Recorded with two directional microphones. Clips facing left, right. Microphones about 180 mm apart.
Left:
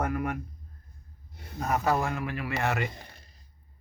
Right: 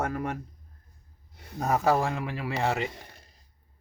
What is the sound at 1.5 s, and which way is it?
Speech, 30° right (ahead or behind).